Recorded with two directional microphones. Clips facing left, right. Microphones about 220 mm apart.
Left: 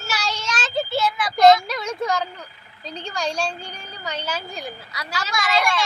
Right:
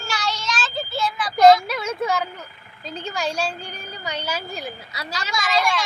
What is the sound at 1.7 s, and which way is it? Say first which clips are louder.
A woman's voice: right 1 dB; 5° right (ahead or behind).